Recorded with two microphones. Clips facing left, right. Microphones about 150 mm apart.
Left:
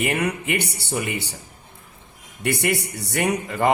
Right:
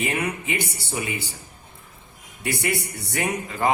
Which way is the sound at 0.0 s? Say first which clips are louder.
Left 3 dB; 65° left (ahead or behind).